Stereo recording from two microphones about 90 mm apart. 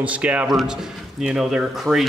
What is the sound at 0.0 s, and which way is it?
Speech, 15° right (ahead or behind).